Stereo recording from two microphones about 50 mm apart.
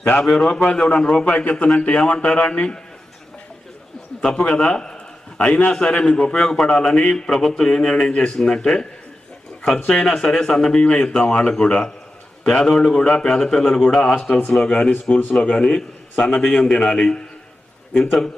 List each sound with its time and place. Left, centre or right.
0.2 s a man's voice: centre
4.2 s a man's voice: centre
12.5 s a man's voice: centre
16.7 s a man's voice: centre